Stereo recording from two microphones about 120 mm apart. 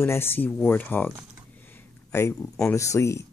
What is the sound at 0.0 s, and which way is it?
Speech, 20° left (ahead or behind).